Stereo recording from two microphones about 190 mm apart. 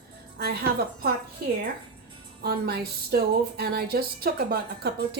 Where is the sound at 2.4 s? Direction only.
55° right (ahead or behind).